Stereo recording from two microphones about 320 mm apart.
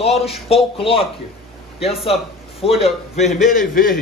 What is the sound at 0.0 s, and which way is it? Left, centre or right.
Speech, centre.